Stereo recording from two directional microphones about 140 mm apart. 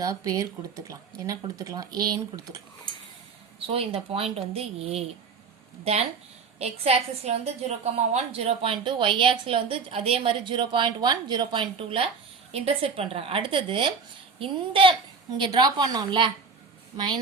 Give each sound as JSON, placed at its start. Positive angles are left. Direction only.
{"t": 0.0, "sound": "speech", "side_deg": -25}
{"t": 3.7, "sound": "a woman's voice", "side_deg": -45}